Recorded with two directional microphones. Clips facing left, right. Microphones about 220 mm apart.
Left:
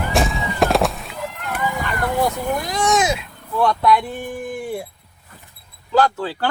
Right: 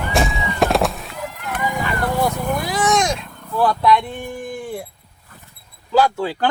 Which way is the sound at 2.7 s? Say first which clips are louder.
Even; centre (ahead or behind).